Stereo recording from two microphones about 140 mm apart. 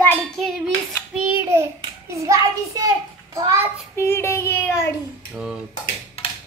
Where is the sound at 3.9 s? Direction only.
15° left (ahead or behind).